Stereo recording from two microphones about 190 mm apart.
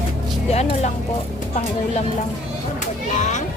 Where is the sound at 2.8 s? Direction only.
40° left (ahead or behind).